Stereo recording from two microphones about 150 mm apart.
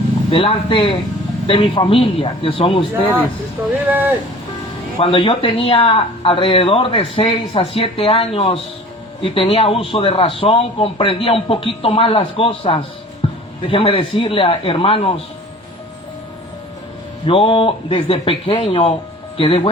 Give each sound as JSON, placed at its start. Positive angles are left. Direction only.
{"t": 0.3, "sound": "speech", "side_deg": 35}
{"t": 4.9, "sound": "speech", "side_deg": 35}
{"t": 13.2, "sound": "music", "side_deg": 40}
{"t": 13.7, "sound": "speech", "side_deg": 35}
{"t": 17.2, "sound": "speech", "side_deg": 35}